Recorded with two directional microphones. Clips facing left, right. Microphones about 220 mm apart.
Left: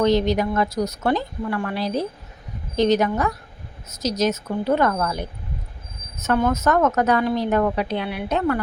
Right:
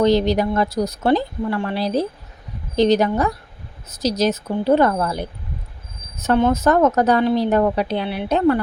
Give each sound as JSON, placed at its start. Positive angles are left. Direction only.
{"t": 0.0, "sound": "speech", "side_deg": -35}